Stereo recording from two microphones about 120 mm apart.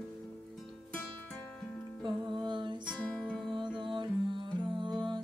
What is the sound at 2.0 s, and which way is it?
Music, 40° right (ahead or behind).